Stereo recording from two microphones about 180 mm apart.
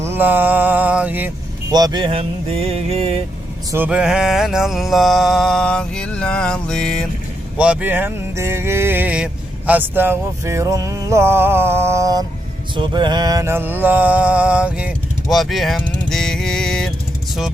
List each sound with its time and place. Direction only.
0.0 s mantra: 10° right (ahead or behind)
1.7 s vehicle: 20° right (ahead or behind)
3.7 s mantra: 10° right (ahead or behind)
7.5 s music: 5° right (ahead or behind)
12.7 s mantra: 25° right (ahead or behind); by 16.9 s 5° left (ahead or behind)